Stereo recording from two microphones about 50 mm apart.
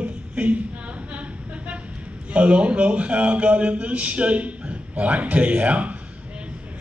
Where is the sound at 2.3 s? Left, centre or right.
Right.